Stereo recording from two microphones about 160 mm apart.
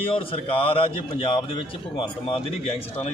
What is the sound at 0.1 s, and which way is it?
A man's voice, 35° left (ahead or behind).